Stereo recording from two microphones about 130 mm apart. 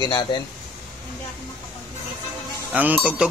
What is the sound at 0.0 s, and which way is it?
Speech, 35° left (ahead or behind).